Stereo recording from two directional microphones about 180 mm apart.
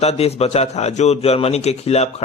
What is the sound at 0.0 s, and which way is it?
A man's voice, 35° left (ahead or behind).